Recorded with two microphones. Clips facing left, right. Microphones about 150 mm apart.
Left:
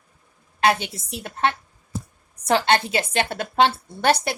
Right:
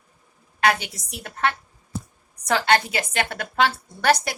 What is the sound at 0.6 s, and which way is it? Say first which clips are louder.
A woman's voice: left 2 dB; 25° left (ahead or behind).